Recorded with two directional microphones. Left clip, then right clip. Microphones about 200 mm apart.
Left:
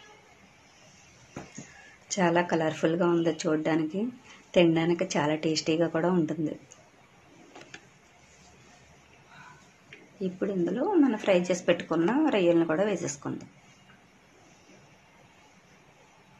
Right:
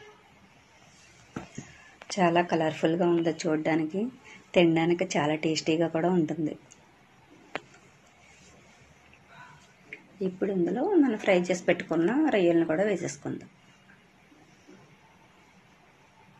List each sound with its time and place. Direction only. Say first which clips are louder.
2.0 s a woman's voice: right 1 dB; centre (ahead or behind)
9.8 s a woman's voice: right 2 dB; centre (ahead or behind)